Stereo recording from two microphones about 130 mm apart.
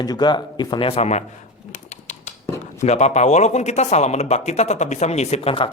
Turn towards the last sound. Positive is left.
turn(degrees=45)  # may be behind; listen again after turning